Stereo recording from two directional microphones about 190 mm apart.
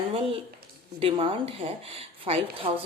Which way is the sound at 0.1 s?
30° right (ahead or behind).